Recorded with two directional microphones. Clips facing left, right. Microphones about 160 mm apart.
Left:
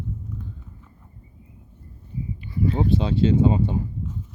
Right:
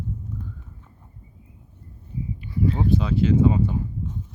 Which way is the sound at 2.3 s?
Centre (ahead or behind).